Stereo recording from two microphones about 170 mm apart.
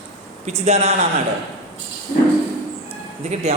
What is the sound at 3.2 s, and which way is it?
Speech, 40° right (ahead or behind).